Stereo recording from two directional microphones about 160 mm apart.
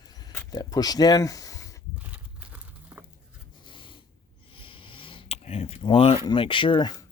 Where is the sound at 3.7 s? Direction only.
30° left (ahead or behind).